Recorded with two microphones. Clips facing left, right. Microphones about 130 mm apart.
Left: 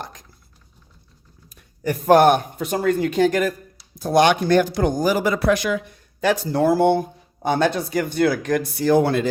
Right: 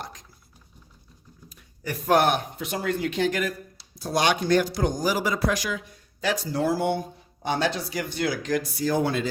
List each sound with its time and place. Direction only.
1.5 s speech: 45° left (ahead or behind)